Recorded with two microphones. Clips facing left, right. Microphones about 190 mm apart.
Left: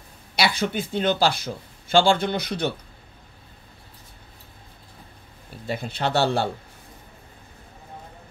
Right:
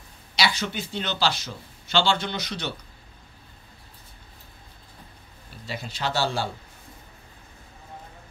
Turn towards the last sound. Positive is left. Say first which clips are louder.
# left 5 dB
turn(degrees=60)  # may be behind; listen again after turning